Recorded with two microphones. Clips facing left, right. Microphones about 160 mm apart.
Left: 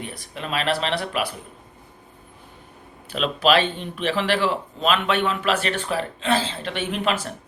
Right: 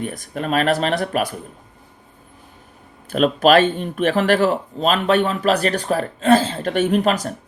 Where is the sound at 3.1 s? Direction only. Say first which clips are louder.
Right 6 dB; 45° right (ahead or behind).